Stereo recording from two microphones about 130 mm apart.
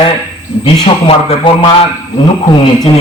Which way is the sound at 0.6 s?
45° left (ahead or behind).